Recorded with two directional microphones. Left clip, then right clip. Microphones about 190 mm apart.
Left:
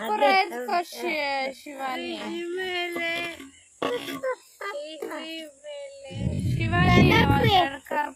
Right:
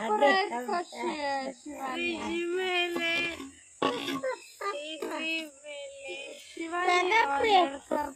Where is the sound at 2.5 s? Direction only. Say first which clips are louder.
Even; 5° right (ahead or behind).